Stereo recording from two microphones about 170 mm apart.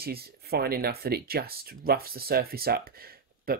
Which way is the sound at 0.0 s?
65° right (ahead or behind).